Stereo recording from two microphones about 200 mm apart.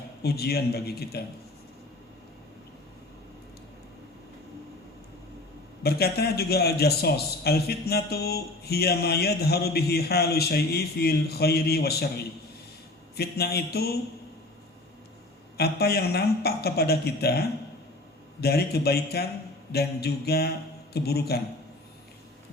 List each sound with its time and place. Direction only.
0.2 s a man's voice: 50° left (ahead or behind)
5.8 s a man's voice: 50° left (ahead or behind)
15.5 s a man's voice: 50° left (ahead or behind)